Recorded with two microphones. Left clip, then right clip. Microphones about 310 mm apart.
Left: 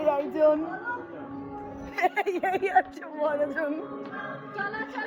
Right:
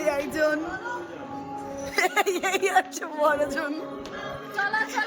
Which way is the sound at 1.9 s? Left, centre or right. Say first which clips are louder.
Right 3 dB; centre.